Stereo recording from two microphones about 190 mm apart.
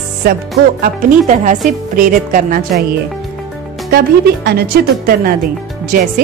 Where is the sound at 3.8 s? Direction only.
55° right (ahead or behind).